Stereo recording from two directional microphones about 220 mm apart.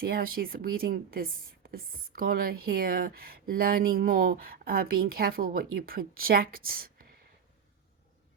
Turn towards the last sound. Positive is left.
turn(degrees=-40)  # may be behind; listen again after turning